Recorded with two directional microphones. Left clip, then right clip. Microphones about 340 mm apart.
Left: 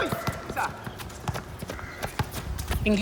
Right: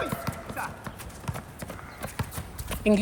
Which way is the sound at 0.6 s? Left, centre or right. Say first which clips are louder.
Left 6 dB; left.